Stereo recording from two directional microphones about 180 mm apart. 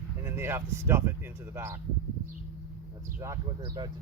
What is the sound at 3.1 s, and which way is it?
Speech, 15° right (ahead or behind).